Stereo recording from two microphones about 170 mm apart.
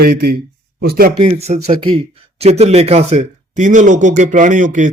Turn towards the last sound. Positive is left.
turn(degrees=-50)  # may be behind; listen again after turning